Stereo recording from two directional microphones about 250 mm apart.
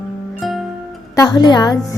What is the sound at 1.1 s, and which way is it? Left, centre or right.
Speech, centre.